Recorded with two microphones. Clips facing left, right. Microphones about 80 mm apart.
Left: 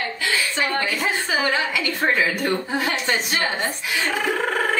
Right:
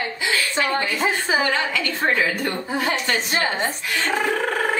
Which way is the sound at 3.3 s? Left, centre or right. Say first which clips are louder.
Right 1 dB; right.